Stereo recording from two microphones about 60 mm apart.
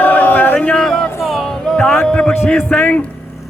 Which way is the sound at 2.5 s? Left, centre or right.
Left.